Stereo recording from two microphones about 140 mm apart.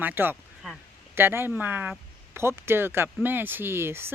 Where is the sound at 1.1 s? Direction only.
15° right (ahead or behind).